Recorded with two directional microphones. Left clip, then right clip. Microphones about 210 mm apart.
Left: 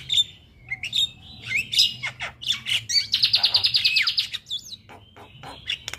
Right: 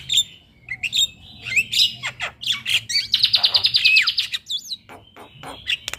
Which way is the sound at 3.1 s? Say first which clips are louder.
Right 4 dB; centre (ahead or behind).